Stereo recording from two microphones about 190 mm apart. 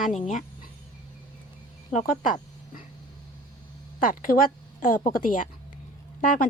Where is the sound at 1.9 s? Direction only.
45° left (ahead or behind).